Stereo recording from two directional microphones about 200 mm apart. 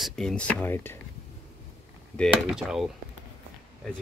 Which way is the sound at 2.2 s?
Centre (ahead or behind).